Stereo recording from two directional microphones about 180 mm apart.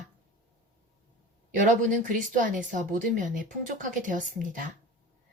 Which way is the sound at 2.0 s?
45° right (ahead or behind).